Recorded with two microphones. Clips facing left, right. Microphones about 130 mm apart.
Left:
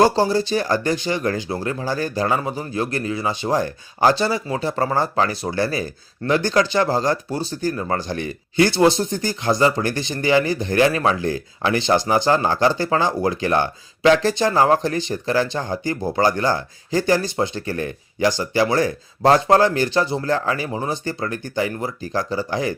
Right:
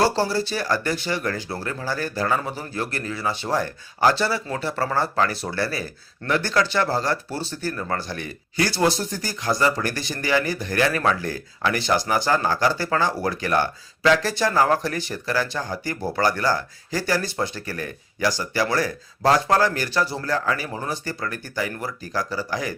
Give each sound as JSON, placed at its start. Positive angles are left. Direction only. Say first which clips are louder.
{"t": 0.0, "sound": "speech", "louder": "left 5 dB", "side_deg": 15}